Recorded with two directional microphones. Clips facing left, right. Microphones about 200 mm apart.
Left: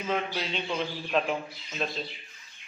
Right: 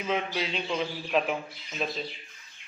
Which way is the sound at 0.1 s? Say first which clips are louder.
Right 1 dB; centre (ahead or behind).